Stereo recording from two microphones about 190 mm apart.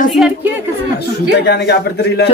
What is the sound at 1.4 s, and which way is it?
Speech, 60° left (ahead or behind).